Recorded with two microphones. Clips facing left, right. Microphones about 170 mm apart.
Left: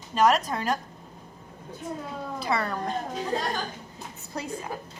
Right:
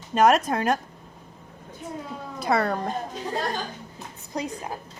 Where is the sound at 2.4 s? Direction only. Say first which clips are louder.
Right 5 dB; 50° right (ahead or behind).